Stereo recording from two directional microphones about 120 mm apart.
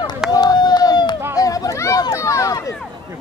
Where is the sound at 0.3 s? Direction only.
35° left (ahead or behind).